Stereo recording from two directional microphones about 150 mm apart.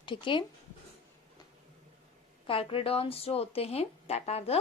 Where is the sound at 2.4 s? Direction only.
35° left (ahead or behind).